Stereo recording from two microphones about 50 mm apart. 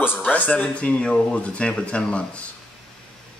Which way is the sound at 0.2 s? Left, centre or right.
Left.